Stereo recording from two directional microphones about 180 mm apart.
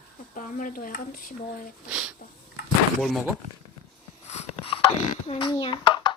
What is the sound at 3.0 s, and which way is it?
Speech, centre (ahead or behind).